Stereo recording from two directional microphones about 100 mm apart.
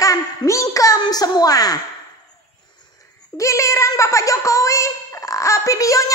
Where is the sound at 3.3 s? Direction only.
30° left (ahead or behind).